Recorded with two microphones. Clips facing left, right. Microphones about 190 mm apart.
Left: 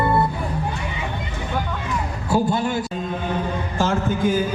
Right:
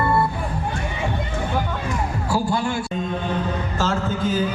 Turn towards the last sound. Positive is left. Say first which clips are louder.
# left 2 dB
turn(degrees=15)  # may be behind; listen again after turning